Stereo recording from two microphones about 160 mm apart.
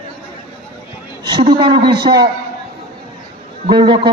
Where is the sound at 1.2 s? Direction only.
30° right (ahead or behind).